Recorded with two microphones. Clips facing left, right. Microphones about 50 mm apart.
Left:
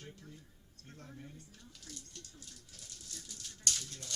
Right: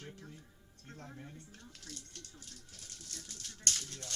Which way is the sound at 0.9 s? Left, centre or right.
Right.